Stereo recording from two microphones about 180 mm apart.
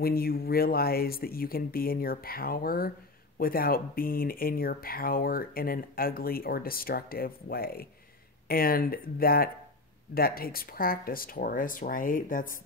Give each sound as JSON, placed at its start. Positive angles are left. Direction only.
{"t": 0.0, "sound": "speech", "side_deg": 55}